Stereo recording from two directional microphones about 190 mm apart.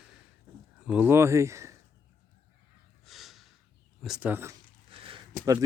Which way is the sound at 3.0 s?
Centre (ahead or behind).